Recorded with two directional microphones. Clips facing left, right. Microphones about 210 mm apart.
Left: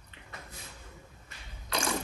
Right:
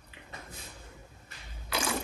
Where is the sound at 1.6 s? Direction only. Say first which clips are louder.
Even; 5° right (ahead or behind).